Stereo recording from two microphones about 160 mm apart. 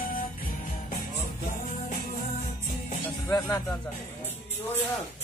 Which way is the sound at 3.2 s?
20° left (ahead or behind).